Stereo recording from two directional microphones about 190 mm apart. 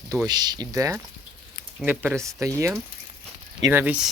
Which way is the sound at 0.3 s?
20° right (ahead or behind).